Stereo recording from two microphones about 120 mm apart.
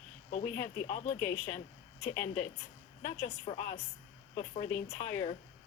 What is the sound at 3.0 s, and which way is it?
A woman's voice, 75° left (ahead or behind).